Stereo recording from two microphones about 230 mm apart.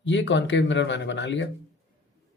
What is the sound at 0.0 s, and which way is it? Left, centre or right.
Speech, left.